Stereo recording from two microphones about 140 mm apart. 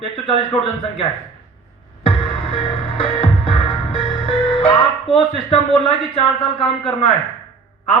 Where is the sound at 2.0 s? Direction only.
40° left (ahead or behind).